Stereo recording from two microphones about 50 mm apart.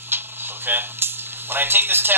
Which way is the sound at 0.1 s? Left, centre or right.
Right.